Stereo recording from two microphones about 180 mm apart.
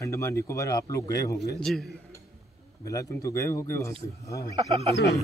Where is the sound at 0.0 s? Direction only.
15° left (ahead or behind).